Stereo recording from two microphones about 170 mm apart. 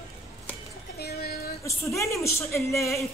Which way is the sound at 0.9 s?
65° left (ahead or behind).